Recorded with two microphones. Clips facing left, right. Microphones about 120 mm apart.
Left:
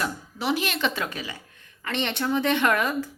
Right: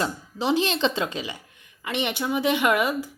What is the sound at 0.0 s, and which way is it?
Speech, 20° right (ahead or behind).